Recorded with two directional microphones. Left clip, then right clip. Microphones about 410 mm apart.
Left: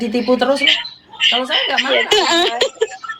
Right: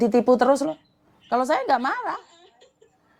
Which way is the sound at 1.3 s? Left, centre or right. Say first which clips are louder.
Left 1 dB; right.